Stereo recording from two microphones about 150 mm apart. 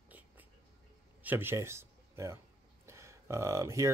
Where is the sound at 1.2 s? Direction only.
15° right (ahead or behind).